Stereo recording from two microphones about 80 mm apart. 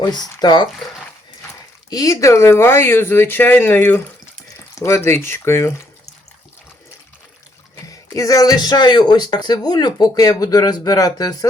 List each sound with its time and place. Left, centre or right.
0.0 s speech: left
1.9 s speech: left
7.9 s speech: left